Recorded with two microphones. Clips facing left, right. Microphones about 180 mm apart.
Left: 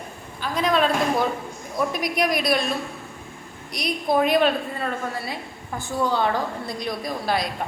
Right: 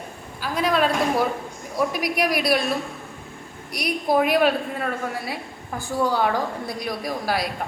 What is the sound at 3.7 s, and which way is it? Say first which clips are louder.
A woman's voice: right 1 dB; 10° right (ahead or behind).